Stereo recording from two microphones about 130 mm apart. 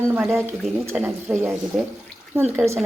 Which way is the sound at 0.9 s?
5° right (ahead or behind).